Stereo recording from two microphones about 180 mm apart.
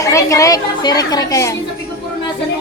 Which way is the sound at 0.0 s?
15° left (ahead or behind).